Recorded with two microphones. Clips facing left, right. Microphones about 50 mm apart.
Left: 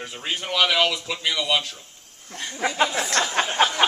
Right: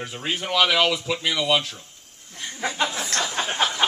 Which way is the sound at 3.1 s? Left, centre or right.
Left.